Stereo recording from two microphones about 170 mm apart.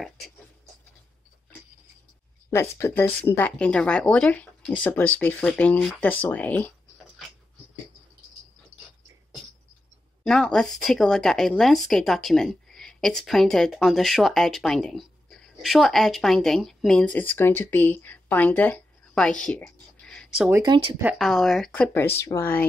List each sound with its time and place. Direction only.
2.5 s speech: 15° left (ahead or behind)
10.2 s speech: 5° left (ahead or behind)
19.4 s a sound: 5° left (ahead or behind)
20.6 s speech: 25° right (ahead or behind)
21.0 s speech: 5° right (ahead or behind)